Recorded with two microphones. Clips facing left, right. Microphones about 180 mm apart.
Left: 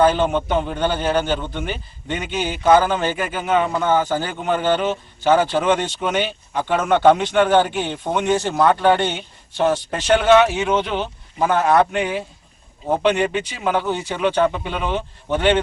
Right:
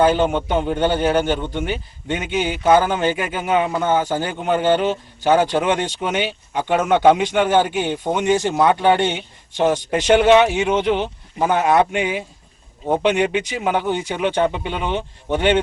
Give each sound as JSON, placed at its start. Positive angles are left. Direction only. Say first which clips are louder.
{"t": 0.0, "sound": "a man's voice", "louder": "even", "side_deg": -10}